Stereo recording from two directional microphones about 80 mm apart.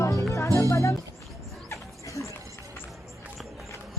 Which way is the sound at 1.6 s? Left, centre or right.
Left.